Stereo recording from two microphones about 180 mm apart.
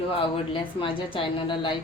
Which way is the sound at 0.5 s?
30° left (ahead or behind).